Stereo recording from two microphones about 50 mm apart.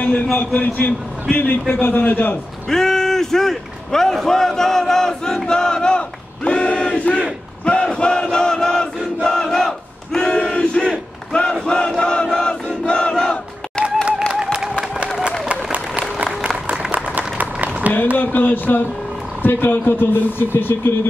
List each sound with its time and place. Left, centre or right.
0.6 s a man's voice: left
2.7 s a man's voice: centre
5.5 s battle cry: centre
14.2 s a sound: centre
17.4 s a sound: right
18.1 s a man's voice: left